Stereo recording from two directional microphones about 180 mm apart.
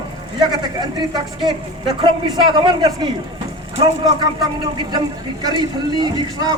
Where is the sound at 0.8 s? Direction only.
25° right (ahead or behind).